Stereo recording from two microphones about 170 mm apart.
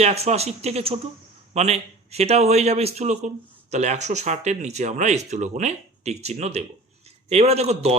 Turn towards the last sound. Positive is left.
turn(degrees=-40)  # may be behind; listen again after turning